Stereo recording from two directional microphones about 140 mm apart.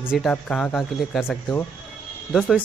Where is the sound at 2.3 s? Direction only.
Centre (ahead or behind).